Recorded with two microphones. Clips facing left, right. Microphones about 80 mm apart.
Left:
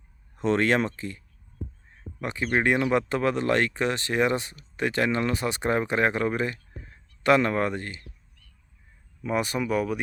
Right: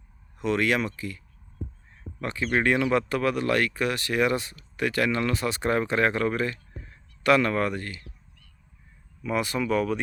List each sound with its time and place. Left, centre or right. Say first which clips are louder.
0.3 s speech: left 2 dB; left
2.2 s speech: even; centre
9.2 s speech: even; left